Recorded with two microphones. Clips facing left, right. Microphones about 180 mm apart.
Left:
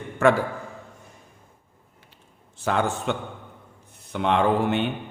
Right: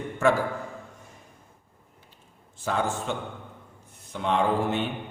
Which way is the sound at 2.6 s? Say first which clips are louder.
Left 3 dB; 70° left (ahead or behind).